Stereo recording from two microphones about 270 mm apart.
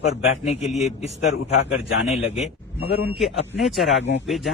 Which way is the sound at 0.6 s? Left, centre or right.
Centre.